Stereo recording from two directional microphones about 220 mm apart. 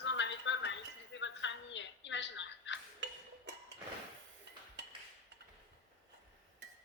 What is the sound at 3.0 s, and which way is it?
Music, 55° right (ahead or behind).